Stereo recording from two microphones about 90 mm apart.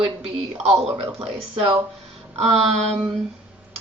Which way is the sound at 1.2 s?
90° right.